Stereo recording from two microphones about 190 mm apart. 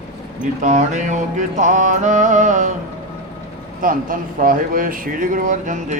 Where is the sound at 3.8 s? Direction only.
45° right (ahead or behind).